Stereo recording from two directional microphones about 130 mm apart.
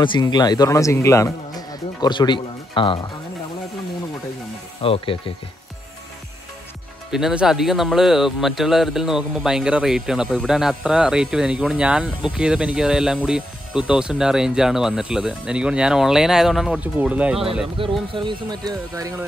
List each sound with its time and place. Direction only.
0.0 s speech: 35° left (ahead or behind)
4.8 s speech: 45° left (ahead or behind)
7.1 s speech: 5° right (ahead or behind)
17.8 s speech: 45° right (ahead or behind); by 19.2 s 25° right (ahead or behind)